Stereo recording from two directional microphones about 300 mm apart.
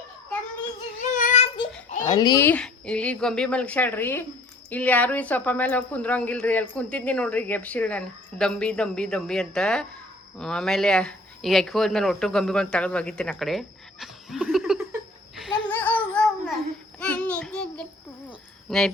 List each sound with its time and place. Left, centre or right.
1.1 s child singing: left
1.9 s speech: centre
15.4 s babbling: centre
17.0 s child singing: centre
18.3 s a sound: centre